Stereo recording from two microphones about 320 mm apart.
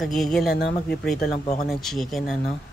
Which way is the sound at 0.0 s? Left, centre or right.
Centre.